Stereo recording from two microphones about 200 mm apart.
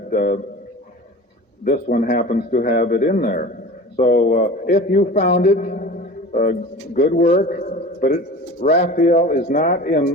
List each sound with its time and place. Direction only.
0.1 s a man's voice: 40° left (ahead or behind)
1.6 s a man's voice: 40° left (ahead or behind)
7.6 s a sound: 40° left (ahead or behind)
8.8 s a man's voice: 40° left (ahead or behind)